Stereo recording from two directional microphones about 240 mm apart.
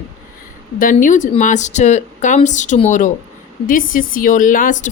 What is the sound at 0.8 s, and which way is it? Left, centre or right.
A woman's voice, left.